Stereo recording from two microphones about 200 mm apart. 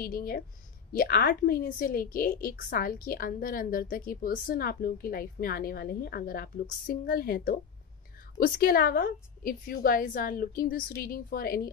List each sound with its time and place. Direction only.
0.0 s a woman's voice: 45° left (ahead or behind)